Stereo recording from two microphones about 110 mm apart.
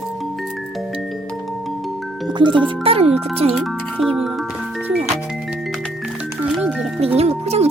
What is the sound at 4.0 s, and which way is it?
Music, 5° right (ahead or behind).